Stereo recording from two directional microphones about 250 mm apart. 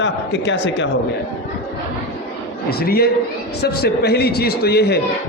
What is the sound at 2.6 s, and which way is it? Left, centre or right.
A man's voice, left.